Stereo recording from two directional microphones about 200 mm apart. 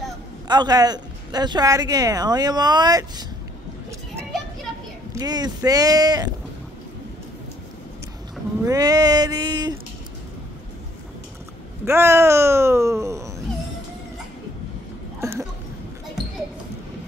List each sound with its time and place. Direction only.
0.5 s speech: 20° right (ahead or behind)
5.1 s speech: 20° right (ahead or behind)
8.6 s speech: 20° right (ahead or behind)
11.8 s speech: 15° right (ahead or behind)
15.1 s a sound: 15° right (ahead or behind)